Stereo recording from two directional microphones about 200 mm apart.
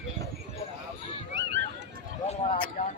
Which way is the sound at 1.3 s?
65° right (ahead or behind).